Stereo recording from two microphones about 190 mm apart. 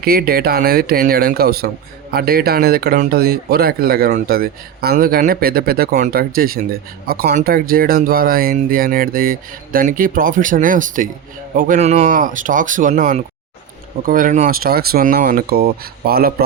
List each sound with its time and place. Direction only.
0.0 s speech: 50° right (ahead or behind)